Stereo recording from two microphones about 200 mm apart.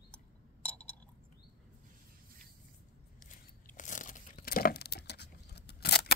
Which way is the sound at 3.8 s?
40° left (ahead or behind).